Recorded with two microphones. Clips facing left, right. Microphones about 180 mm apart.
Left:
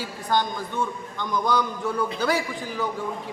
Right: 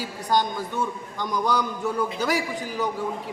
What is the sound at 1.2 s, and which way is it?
Speech, 10° right (ahead or behind).